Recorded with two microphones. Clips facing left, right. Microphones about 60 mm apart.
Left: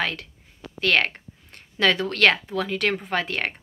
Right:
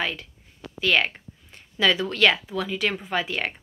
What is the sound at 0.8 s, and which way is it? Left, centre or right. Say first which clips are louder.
A woman's voice: left 1 dB; left.